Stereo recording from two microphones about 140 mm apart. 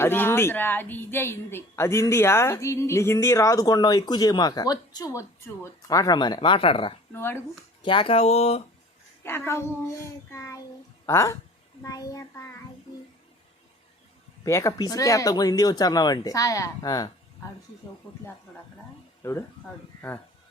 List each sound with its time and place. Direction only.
0.0 s speech: 15° left (ahead or behind); by 6.9 s 40° left (ahead or behind)
7.1 s a child's voice: 15° left (ahead or behind)
7.8 s speech: 35° left (ahead or behind)
9.2 s a child's voice: 15° left (ahead or behind)
14.4 s speech: 20° left (ahead or behind)
19.2 s speech: 20° left (ahead or behind)